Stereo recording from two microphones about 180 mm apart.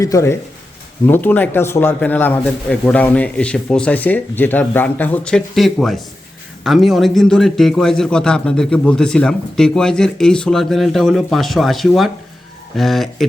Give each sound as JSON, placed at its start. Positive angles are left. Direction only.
{"t": 0.0, "sound": "a man's voice", "side_deg": 15}